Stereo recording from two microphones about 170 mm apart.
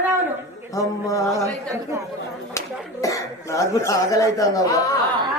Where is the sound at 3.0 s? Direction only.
20° left (ahead or behind).